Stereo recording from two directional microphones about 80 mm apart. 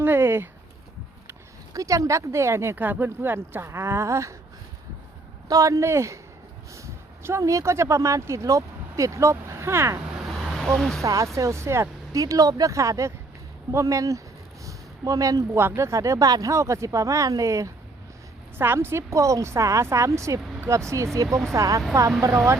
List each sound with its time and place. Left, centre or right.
0.0 s speech: right
1.3 s speech: right
2.7 s speech: right
5.5 s speech: right
10.3 s a sound: centre
10.8 s speech: centre
11.0 s speech: right
14.6 s a sound: right
15.5 s speech: right
18.5 s speech: right